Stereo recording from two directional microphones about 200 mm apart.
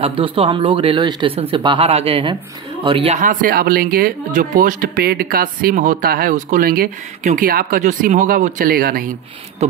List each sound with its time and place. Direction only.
0.0 s speech: 25° right (ahead or behind)
3.2 s speech: 40° right (ahead or behind)
9.6 s speech: 35° right (ahead or behind)